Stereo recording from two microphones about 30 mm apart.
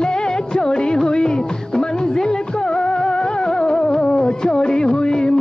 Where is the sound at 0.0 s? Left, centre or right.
Left.